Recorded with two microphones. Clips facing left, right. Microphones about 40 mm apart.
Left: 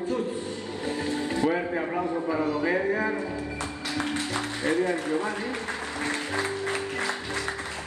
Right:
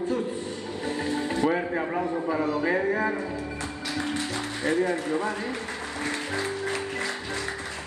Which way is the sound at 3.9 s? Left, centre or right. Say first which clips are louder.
Left 1 dB; left.